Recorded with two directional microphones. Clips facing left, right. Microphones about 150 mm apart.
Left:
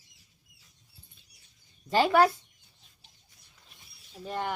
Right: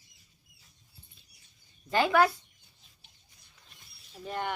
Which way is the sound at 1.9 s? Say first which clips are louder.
Left 2 dB; 30° left (ahead or behind).